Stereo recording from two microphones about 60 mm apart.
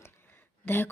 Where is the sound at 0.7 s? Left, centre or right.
Left.